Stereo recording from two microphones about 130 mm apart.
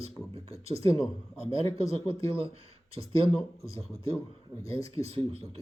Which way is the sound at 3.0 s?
25° left (ahead or behind).